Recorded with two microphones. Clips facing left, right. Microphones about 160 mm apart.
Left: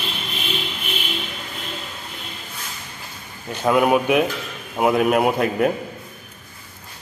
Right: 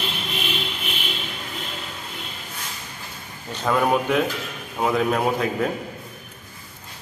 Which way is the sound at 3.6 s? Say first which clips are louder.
Left 4 dB; 10° left (ahead or behind).